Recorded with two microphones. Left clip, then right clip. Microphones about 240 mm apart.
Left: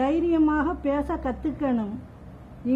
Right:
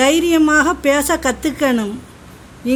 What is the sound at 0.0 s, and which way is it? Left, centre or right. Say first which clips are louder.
A woman's voice: right 9 dB; right.